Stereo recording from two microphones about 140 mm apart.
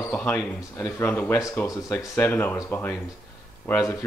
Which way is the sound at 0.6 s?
25° left (ahead or behind).